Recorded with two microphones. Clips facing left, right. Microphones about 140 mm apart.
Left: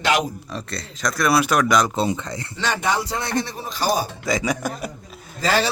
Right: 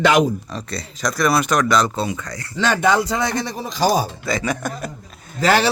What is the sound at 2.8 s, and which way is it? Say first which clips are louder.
Speech: right 7 dB; 90° right.